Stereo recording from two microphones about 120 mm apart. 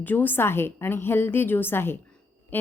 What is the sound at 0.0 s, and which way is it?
A woman's voice, 15° left (ahead or behind).